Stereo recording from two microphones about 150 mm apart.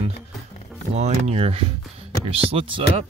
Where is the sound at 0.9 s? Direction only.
50° right (ahead or behind).